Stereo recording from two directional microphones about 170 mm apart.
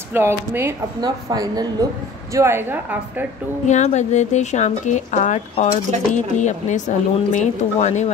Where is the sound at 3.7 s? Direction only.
45° left (ahead or behind).